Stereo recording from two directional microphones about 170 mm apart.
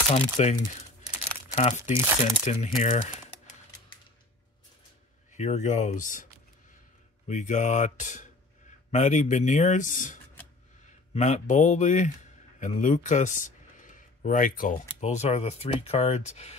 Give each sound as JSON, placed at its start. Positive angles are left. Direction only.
{"t": 0.1, "sound": "speech", "side_deg": 40}
{"t": 1.9, "sound": "speech", "side_deg": -15}
{"t": 2.4, "sound": "speech", "side_deg": 45}
{"t": 5.3, "sound": "speech", "side_deg": 40}
{"t": 7.2, "sound": "speech", "side_deg": 45}
{"t": 11.1, "sound": "speech", "side_deg": 45}